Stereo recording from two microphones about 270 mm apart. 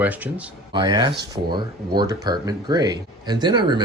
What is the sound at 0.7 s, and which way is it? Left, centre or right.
Speech, centre.